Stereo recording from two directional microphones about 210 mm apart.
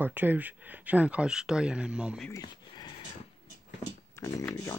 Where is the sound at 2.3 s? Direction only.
20° left (ahead or behind).